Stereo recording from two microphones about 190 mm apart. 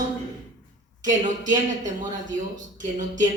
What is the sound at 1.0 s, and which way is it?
A man's voice, 40° right (ahead or behind).